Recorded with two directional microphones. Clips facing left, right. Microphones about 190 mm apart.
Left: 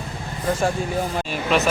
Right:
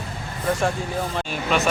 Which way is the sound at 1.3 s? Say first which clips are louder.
Left 2 dB; centre (ahead or behind).